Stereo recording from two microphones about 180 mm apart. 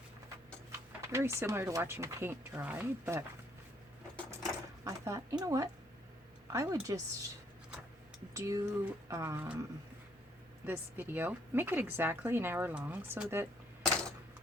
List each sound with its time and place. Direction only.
0.7 s speech: 15° right (ahead or behind)
4.8 s a woman's voice: 20° right (ahead or behind)
8.3 s speech: 15° right (ahead or behind)
10.7 s speech: 10° right (ahead or behind)